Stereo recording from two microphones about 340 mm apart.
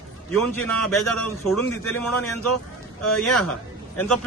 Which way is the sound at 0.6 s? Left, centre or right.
Centre.